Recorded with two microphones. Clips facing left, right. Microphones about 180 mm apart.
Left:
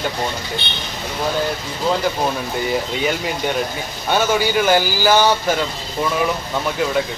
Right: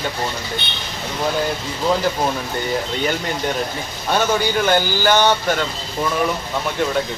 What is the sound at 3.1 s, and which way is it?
A man's voice, centre (ahead or behind).